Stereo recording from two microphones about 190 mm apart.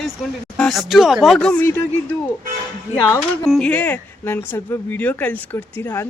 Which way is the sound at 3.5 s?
5° left (ahead or behind).